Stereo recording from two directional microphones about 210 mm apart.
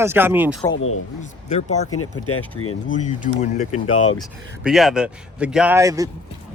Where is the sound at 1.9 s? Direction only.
90° left.